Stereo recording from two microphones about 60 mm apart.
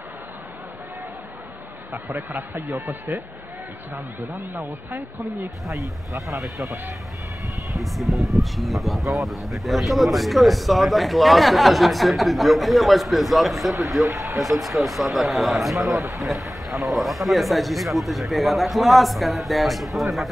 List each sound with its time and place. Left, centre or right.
3.9 s speech: right
5.7 s speech: centre